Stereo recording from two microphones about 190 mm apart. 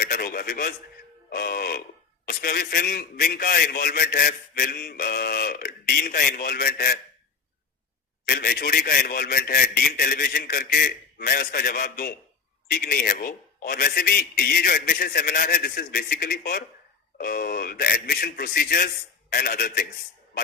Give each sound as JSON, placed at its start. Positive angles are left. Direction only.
{"t": 0.0, "sound": "radio", "side_deg": 50}
{"t": 1.3, "sound": "a man's voice", "side_deg": 50}
{"t": 8.3, "sound": "a man's voice", "side_deg": 50}